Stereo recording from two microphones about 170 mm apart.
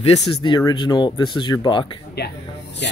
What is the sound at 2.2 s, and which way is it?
Speech, 75° left (ahead or behind).